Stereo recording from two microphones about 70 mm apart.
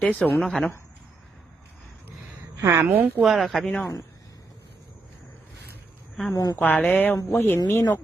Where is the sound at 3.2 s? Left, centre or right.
Centre.